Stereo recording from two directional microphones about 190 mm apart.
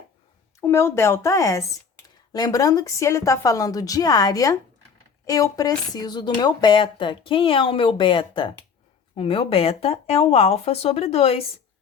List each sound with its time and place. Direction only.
0.6 s speech: 15° left (ahead or behind); by 11.4 s 30° left (ahead or behind)